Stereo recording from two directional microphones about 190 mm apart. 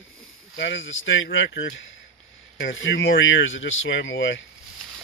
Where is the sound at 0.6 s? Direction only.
75° left (ahead or behind).